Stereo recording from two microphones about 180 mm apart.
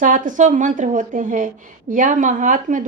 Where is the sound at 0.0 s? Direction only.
45° right (ahead or behind).